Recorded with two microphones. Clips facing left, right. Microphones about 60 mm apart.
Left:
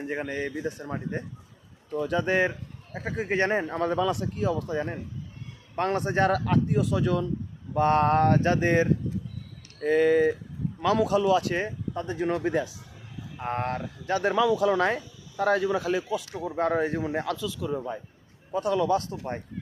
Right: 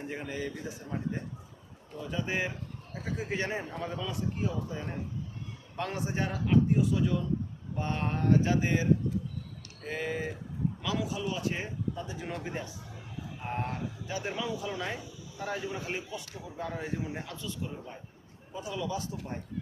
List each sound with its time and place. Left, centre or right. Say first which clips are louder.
0.0 s speech: left 7 dB; left
0.3 s speech: left 5 dB; left
0.8 s speech: left 3 dB; left
2.9 s speech: left 7 dB; left
3.6 s speech: left 10 dB; left
5.7 s a man's voice: left 8 dB; left
12.0 s speech: left 11 dB; left
13.4 s a man's voice: left 6 dB; left
14.1 s a man's voice: left 12 dB; left
17.1 s speech: left 10 dB; left
18.5 s a man's voice: left 11 dB; left